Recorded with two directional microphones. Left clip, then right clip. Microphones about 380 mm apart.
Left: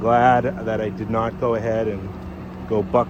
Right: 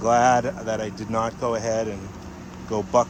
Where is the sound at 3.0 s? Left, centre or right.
Centre.